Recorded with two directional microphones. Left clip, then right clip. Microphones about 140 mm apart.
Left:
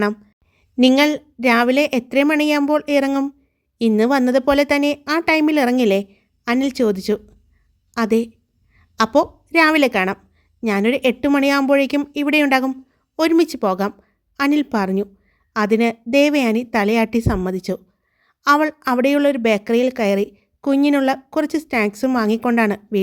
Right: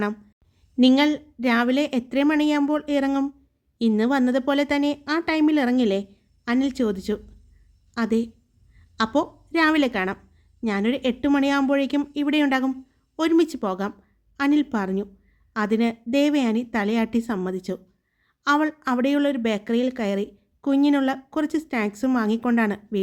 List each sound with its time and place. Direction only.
0.8 s a woman's voice: 40° left (ahead or behind)